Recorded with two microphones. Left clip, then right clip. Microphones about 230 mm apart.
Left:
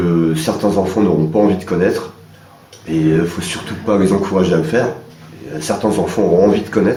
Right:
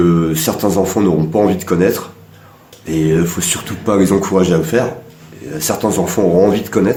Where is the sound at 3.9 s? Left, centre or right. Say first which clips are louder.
Right 1 dB; right.